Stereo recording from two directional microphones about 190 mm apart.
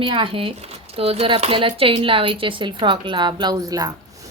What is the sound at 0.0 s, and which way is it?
Speech, 25° right (ahead or behind).